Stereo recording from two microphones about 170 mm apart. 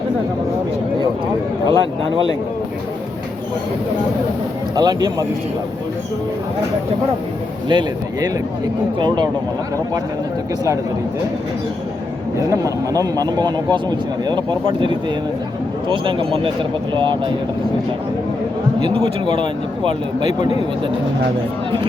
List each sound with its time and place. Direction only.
1.6 s speech: 30° right (ahead or behind)
4.7 s speech: 25° right (ahead or behind)
7.7 s speech: 25° right (ahead or behind)
12.4 s speech: 20° right (ahead or behind)
18.8 s speech: 30° right (ahead or behind)